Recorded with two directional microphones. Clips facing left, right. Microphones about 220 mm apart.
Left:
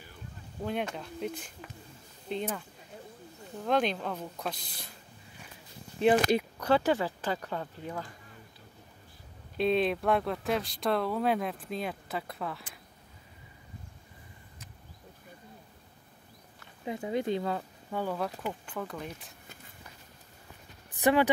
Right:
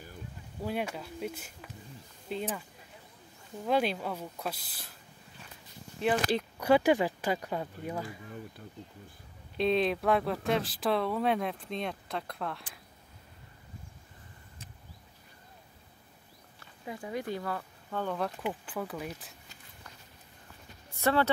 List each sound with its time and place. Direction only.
0.6 s speech: 5° right (ahead or behind)
3.6 s speech: 5° right (ahead or behind)
6.6 s speech: 10° right (ahead or behind)
9.6 s speech: centre (ahead or behind)
16.8 s speech: 25° left (ahead or behind)
17.9 s speech: 5° left (ahead or behind)
20.9 s speech: 15° left (ahead or behind)